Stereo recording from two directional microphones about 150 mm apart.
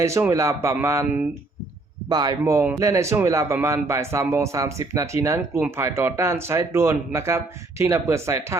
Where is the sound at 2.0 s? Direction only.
25° right (ahead or behind).